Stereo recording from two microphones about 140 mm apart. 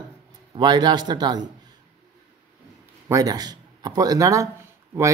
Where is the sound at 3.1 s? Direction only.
25° right (ahead or behind).